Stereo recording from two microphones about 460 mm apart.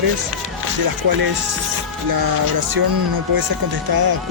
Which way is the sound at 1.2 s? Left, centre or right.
Right.